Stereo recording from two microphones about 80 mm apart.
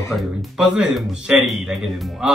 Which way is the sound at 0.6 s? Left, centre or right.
Centre.